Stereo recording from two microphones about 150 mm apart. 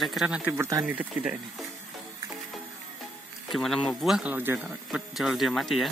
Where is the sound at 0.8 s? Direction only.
10° right (ahead or behind).